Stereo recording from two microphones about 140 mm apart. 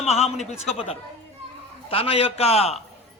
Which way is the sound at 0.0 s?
50° left (ahead or behind).